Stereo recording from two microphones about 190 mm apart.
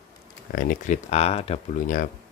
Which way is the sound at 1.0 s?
35° left (ahead or behind).